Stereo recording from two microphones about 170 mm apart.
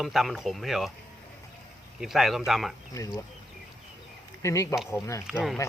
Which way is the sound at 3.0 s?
20° left (ahead or behind).